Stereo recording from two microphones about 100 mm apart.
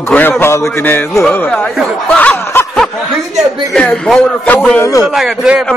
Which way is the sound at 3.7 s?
5° left (ahead or behind).